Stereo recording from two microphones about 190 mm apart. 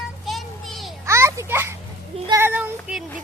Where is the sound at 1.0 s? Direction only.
15° right (ahead or behind).